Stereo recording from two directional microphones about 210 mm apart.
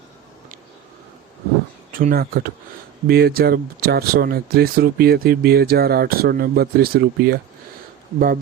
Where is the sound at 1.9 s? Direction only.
40° right (ahead or behind).